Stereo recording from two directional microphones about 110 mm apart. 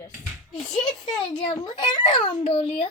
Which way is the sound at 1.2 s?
50° left (ahead or behind).